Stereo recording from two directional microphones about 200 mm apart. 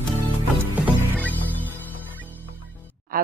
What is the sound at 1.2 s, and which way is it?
Music, 10° left (ahead or behind).